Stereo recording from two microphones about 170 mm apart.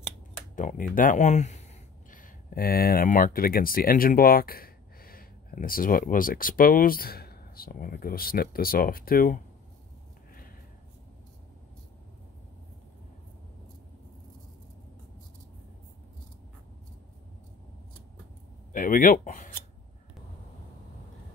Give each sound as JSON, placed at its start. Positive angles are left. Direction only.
{"t": 0.6, "sound": "speech", "side_deg": 50}
{"t": 18.7, "sound": "speech", "side_deg": 55}